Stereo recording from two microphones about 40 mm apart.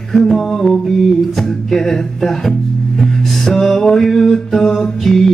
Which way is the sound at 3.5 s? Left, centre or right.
Centre.